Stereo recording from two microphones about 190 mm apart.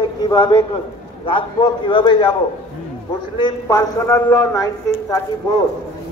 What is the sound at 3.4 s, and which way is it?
A woman's voice, 20° left (ahead or behind).